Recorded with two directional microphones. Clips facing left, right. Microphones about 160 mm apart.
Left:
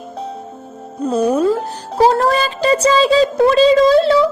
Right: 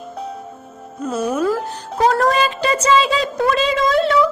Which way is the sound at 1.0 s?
35° left (ahead or behind).